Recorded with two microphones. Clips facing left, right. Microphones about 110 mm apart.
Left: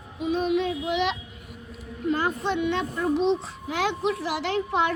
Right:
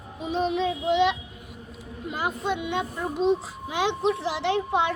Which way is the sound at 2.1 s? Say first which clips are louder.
Left 3 dB; 15° right (ahead or behind).